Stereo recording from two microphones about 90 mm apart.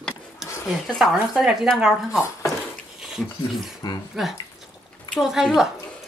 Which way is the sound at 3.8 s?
50° left (ahead or behind).